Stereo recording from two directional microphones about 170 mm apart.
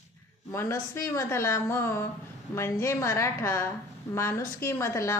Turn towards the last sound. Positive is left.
turn(degrees=15)  # may be behind; listen again after turning